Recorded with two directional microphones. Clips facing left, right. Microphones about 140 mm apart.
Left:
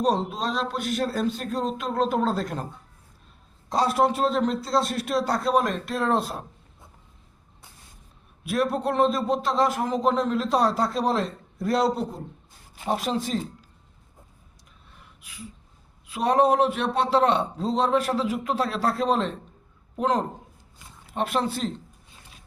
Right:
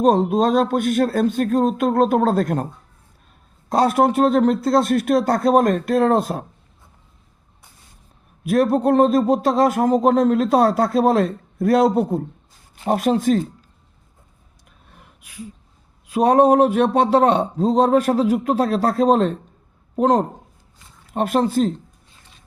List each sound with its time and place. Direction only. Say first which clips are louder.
0.0 s speech: right 9 dB; 50° right (ahead or behind)
3.7 s speech: right 6 dB; 55° right (ahead or behind)
8.4 s speech: right 8 dB; 45° right (ahead or behind)
14.9 s a sound: right 8 dB; 50° right (ahead or behind)
16.0 s speech: right 7 dB; 45° right (ahead or behind)